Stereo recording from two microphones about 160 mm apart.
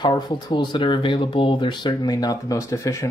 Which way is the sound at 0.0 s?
25° left (ahead or behind).